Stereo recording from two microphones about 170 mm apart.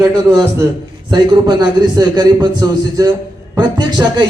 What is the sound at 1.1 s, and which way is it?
A man's voice, 25° right (ahead or behind).